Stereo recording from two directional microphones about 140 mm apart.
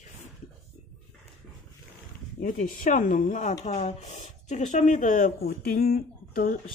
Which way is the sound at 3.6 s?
55° left (ahead or behind).